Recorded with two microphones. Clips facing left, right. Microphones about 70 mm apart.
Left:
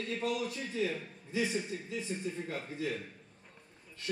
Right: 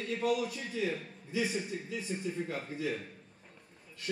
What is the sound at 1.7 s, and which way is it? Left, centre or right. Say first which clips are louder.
Speech: right 2 dB; right.